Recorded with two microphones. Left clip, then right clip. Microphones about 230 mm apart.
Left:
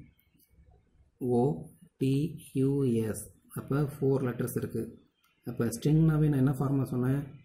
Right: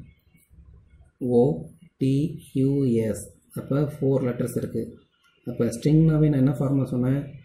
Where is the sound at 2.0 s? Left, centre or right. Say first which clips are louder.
Right 6 dB; left.